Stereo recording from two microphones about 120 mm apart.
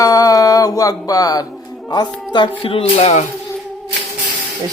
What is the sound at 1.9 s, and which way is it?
Speech, 40° left (ahead or behind).